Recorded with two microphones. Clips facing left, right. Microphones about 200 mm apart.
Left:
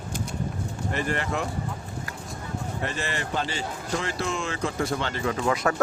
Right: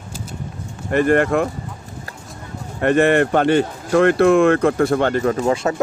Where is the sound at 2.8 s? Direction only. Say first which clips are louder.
Right 19 dB; 60° right (ahead or behind); by 5.5 s 45° right (ahead or behind).